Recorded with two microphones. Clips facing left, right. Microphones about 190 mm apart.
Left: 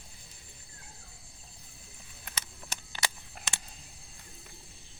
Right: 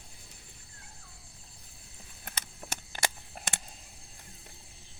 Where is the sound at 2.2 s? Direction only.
50° right (ahead or behind).